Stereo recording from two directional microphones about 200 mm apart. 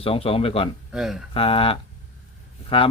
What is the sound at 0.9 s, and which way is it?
Speech, centre (ahead or behind).